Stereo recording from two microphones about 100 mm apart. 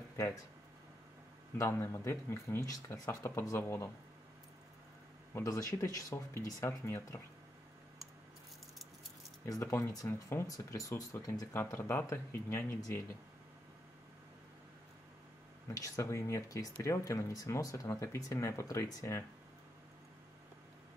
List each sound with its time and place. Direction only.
1.6 s speech: 25° left (ahead or behind)
5.3 s speech: 35° left (ahead or behind)
9.5 s speech: 30° left (ahead or behind)
11.5 s speech: 25° left (ahead or behind)
15.7 s speech: 30° left (ahead or behind)